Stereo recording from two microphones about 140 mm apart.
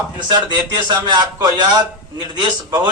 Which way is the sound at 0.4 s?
30° right (ahead or behind).